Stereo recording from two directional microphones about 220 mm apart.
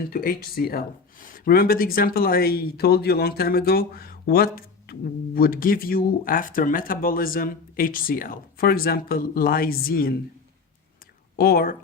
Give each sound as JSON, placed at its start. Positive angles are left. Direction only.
{"t": 0.1, "sound": "speech", "side_deg": 40}
{"t": 11.3, "sound": "speech", "side_deg": 45}